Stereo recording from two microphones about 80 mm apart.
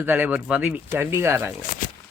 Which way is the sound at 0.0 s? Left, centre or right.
Right.